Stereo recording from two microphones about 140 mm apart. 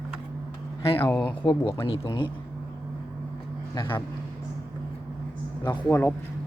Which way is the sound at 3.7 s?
30° left (ahead or behind).